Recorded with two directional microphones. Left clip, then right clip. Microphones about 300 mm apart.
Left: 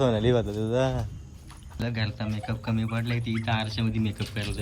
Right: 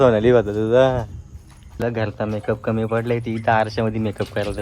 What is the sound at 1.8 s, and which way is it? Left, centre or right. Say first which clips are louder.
Speech: right 11 dB; centre.